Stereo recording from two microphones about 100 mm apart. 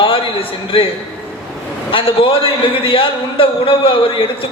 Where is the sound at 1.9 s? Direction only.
60° left (ahead or behind).